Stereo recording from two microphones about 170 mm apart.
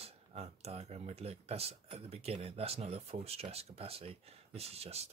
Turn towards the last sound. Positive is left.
turn(degrees=-40)  # may be behind; listen again after turning